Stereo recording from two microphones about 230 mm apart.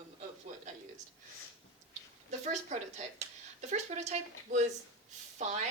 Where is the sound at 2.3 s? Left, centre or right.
Right.